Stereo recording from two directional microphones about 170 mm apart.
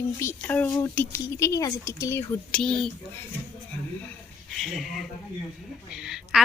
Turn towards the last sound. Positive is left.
turn(degrees=-5)  # may be behind; listen again after turning